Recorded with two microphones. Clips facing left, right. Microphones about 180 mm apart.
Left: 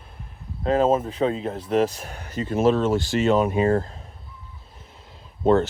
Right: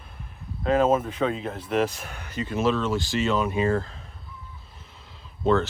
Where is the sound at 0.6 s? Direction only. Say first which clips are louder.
Left 1 dB; 35° left (ahead or behind).